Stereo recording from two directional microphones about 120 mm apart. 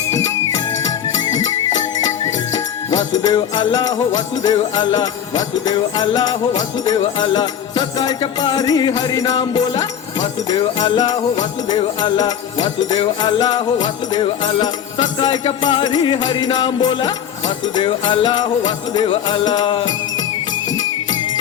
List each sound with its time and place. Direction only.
2.9 s music: 35° left (ahead or behind)